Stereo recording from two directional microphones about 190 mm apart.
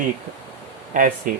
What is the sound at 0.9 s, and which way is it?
Speech, 45° right (ahead or behind).